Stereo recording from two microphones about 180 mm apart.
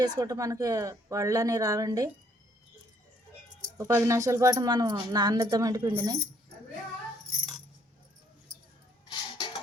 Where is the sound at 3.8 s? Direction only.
15° right (ahead or behind).